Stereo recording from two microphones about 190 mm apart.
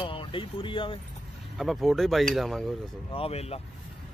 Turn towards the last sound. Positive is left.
turn(degrees=30)  # may be behind; listen again after turning